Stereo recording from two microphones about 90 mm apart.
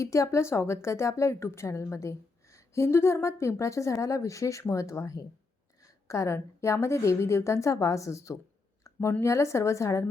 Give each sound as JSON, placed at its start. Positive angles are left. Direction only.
{"t": 0.0, "sound": "a woman's voice", "side_deg": 35}
{"t": 8.8, "sound": "a sound", "side_deg": 30}
{"t": 9.2, "sound": "a woman's voice", "side_deg": 35}